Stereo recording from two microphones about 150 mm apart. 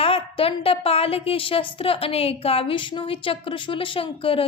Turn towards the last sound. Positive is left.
turn(degrees=40)  # may be behind; listen again after turning